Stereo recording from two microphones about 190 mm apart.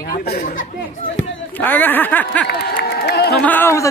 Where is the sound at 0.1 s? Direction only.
50° left (ahead or behind).